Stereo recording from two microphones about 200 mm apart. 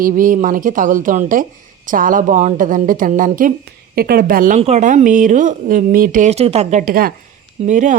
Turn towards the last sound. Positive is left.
turn(degrees=-40)  # may be behind; listen again after turning